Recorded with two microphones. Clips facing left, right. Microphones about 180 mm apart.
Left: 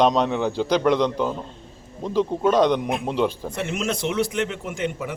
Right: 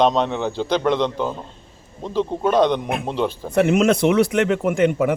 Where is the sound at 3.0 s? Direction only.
Centre (ahead or behind).